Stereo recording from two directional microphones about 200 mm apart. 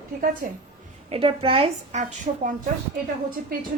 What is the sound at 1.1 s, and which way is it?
A woman's voice, 25° right (ahead or behind).